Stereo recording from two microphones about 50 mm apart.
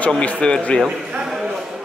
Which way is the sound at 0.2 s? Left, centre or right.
Left.